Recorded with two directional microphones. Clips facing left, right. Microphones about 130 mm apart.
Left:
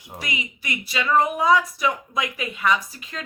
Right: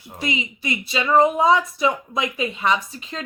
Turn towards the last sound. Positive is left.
turn(degrees=-25)  # may be behind; listen again after turning